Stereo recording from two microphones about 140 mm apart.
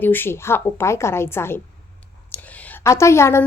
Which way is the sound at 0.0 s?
15° left (ahead or behind).